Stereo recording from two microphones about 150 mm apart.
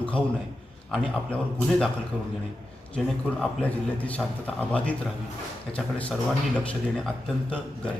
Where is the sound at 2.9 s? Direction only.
10° left (ahead or behind).